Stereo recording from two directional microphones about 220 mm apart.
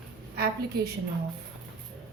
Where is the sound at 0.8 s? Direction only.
45° right (ahead or behind).